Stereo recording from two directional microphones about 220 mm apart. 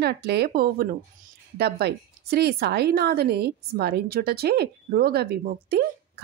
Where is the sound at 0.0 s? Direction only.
45° right (ahead or behind).